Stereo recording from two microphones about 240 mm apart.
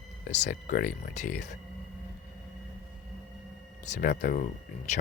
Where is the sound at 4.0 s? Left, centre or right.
Left.